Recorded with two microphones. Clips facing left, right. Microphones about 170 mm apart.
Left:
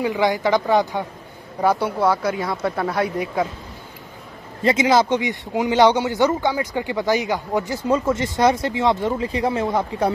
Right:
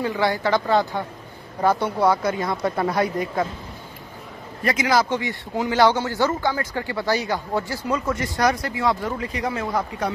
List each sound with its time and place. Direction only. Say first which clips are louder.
0.0 s speech: left 3 dB; 15° left (ahead or behind)
4.6 s speech: left 4 dB; 25° left (ahead or behind)